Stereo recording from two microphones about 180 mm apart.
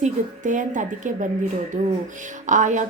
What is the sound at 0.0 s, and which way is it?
A woman's voice, 45° right (ahead or behind).